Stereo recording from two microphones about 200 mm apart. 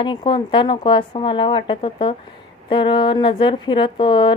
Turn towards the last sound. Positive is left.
turn(degrees=25)  # may be behind; listen again after turning